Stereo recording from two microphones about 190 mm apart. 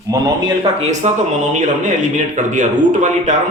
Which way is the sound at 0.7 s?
35° right (ahead or behind).